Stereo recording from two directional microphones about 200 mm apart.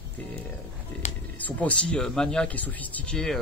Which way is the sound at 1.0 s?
35° left (ahead or behind).